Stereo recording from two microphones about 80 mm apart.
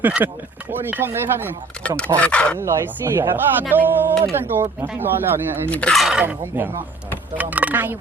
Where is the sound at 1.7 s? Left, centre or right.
Centre.